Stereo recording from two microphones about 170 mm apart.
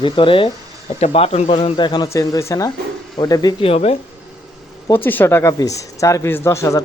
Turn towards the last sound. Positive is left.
turn(degrees=15)  # may be behind; listen again after turning